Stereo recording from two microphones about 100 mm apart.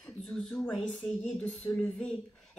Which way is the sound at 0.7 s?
10° left (ahead or behind).